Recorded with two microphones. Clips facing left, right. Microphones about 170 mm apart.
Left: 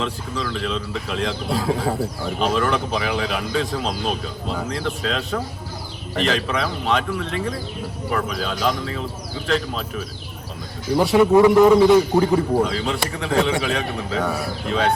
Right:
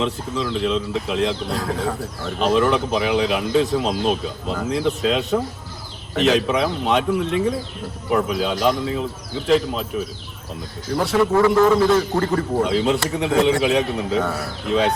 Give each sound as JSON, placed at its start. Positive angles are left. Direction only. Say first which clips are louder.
{"t": 0.0, "sound": "speech", "louder": "right 3 dB", "side_deg": 0}
{"t": 11.3, "sound": "a man's voice", "louder": "left 3 dB", "side_deg": 15}
{"t": 12.2, "sound": "speech", "louder": "left 2 dB", "side_deg": 5}